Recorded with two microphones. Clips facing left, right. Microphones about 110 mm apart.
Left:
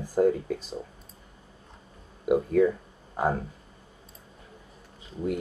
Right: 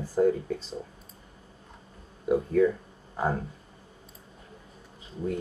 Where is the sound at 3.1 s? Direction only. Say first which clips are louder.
Left 2 dB; 20° left (ahead or behind).